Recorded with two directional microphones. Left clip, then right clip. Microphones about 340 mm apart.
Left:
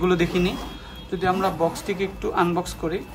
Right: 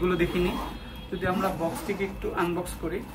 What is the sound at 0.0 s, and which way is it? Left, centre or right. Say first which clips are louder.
Speech: left 4 dB; centre.